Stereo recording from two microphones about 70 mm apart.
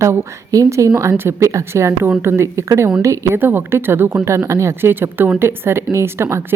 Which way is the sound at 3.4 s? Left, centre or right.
Right.